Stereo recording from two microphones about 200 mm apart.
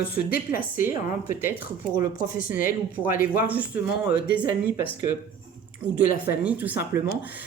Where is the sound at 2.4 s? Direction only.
45° left (ahead or behind).